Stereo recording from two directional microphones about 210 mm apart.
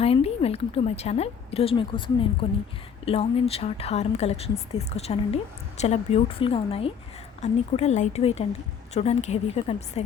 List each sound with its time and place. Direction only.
0.0 s a woman's voice: 30° left (ahead or behind)